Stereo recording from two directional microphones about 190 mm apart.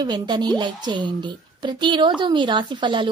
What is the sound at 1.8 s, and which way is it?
A woman's voice, 25° right (ahead or behind).